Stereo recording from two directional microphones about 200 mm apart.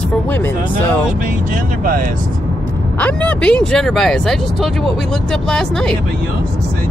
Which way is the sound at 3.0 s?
5° left (ahead or behind).